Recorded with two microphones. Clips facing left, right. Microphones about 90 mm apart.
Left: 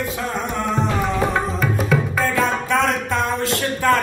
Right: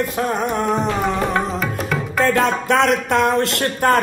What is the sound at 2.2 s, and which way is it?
Music, 70° right (ahead or behind).